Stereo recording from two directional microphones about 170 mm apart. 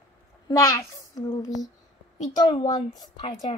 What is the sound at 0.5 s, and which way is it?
A woman's voice, 20° left (ahead or behind).